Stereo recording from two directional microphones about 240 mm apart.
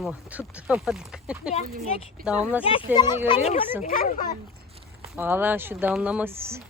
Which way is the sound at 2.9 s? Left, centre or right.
Centre.